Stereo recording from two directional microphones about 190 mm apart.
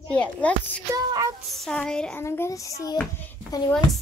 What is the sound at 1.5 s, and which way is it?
A woman's voice, centre (ahead or behind).